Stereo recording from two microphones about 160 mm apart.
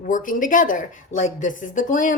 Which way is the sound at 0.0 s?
55° left (ahead or behind).